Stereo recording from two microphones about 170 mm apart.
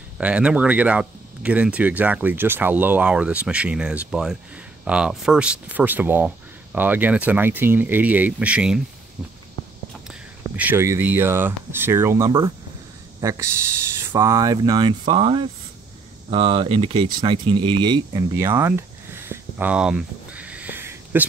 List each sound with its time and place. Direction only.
0.2 s speech: 5° right (ahead or behind)
10.0 s speech: 10° right (ahead or behind); by 18.2 s 25° right (ahead or behind)
18.3 s a sound: 15° right (ahead or behind)